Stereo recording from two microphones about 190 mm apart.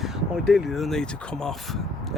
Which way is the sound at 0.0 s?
Centre (ahead or behind).